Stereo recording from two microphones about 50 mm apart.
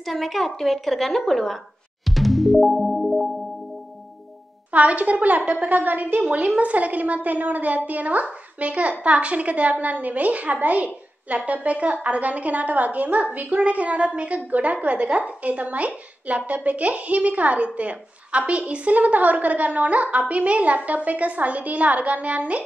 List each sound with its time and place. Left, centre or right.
0.0 s a woman's voice: centre
2.0 s music: centre
4.6 s a woman's voice: right
6.3 s a woman's voice: right